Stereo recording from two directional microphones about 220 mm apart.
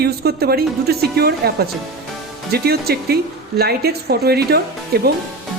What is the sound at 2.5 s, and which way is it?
A woman's voice, 45° right (ahead or behind).